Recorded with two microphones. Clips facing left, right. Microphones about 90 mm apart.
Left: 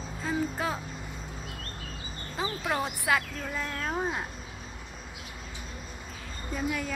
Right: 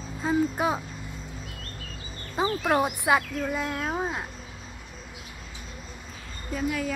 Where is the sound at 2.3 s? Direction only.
20° right (ahead or behind); by 4.3 s 5° right (ahead or behind).